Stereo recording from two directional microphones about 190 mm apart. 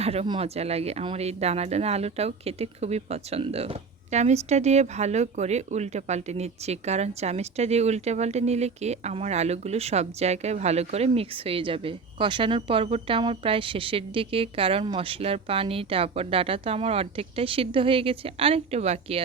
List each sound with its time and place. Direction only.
0.0 s speech: 30° right (ahead or behind)